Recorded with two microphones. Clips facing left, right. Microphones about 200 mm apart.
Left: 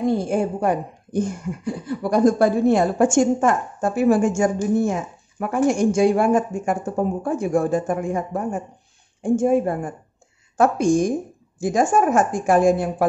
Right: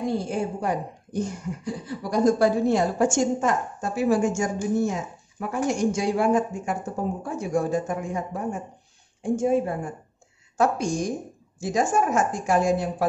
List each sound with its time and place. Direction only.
0.2 s speech: 55° left (ahead or behind)